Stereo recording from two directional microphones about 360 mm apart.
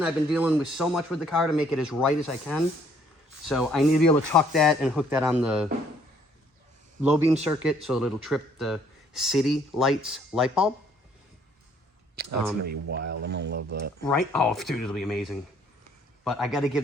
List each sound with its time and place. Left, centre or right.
0.0 s speech: centre
7.5 s speech: centre
12.1 s a sound: right
12.9 s speech: right
14.0 s speech: centre